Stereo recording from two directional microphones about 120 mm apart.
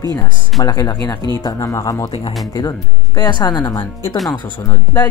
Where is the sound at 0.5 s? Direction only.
30° left (ahead or behind).